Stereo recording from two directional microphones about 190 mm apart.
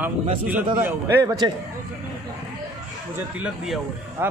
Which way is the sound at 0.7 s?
10° right (ahead or behind).